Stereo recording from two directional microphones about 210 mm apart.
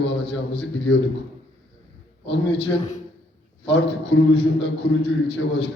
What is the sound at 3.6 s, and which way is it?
A man's voice, 55° left (ahead or behind).